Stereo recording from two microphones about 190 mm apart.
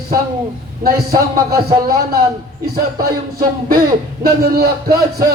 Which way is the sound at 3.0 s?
50° right (ahead or behind).